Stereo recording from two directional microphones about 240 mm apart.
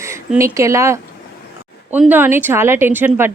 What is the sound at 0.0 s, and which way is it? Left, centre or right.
A woman's voice, centre.